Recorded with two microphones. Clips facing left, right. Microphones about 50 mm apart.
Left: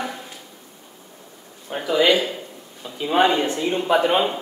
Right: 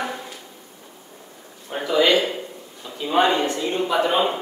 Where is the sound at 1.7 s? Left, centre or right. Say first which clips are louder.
Even; centre.